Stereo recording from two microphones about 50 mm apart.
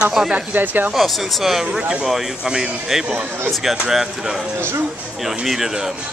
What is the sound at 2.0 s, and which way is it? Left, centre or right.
Speech, centre.